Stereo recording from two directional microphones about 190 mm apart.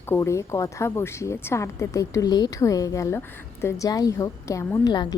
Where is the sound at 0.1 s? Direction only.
15° left (ahead or behind).